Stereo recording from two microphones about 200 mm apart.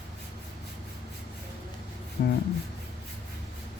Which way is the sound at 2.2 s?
50° left (ahead or behind).